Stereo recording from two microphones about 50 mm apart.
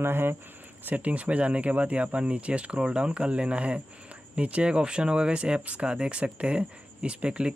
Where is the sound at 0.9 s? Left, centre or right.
Right.